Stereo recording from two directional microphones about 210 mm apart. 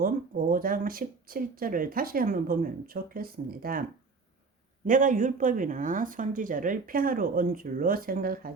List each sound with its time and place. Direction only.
0.0 s speech: 40° right (ahead or behind)
4.9 s speech: 40° right (ahead or behind)